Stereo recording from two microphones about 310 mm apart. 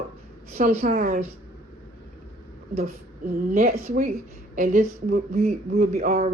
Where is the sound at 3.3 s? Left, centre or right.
Right.